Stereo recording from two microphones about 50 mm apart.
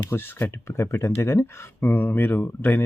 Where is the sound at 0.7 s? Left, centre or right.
Left.